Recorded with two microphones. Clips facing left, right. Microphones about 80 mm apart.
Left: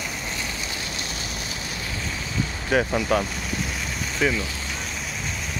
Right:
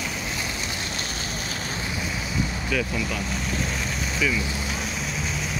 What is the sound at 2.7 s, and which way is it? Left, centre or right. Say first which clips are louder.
Speech: left 10 dB; left.